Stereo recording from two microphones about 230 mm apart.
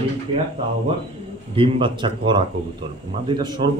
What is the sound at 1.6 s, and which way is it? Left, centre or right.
Speech, right.